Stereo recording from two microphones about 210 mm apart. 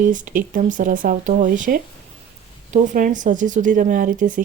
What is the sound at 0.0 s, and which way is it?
Speech, 40° right (ahead or behind).